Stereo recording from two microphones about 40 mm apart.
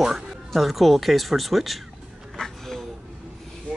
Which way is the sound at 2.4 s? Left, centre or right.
Centre.